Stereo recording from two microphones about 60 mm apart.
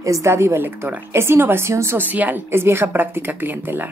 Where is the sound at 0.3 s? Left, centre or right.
Right.